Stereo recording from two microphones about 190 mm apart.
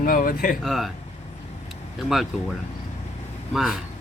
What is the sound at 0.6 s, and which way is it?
Speech, centre (ahead or behind).